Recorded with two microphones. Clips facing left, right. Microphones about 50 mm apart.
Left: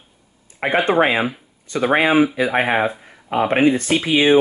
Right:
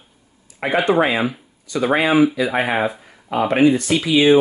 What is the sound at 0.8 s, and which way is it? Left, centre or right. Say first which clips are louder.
Speech: even; left.